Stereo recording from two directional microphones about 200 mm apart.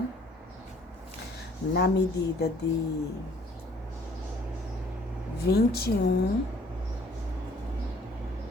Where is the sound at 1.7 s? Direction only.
55° left (ahead or behind).